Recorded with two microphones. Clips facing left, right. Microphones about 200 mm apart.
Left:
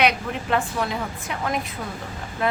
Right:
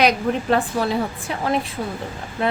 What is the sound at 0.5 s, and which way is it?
A woman's voice, 35° right (ahead or behind).